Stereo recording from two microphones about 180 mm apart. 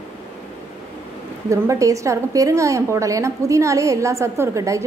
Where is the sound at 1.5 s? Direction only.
15° right (ahead or behind).